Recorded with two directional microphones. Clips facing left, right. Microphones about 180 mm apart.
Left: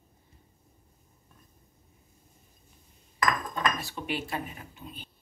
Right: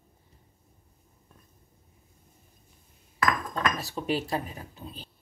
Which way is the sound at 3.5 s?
35° right (ahead or behind).